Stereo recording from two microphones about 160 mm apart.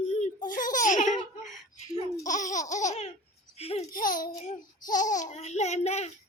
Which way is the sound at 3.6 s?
40° left (ahead or behind).